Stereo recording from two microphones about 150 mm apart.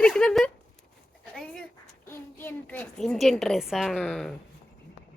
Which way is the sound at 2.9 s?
Centre (ahead or behind).